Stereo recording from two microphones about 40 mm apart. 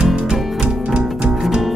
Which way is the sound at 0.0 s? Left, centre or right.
Right.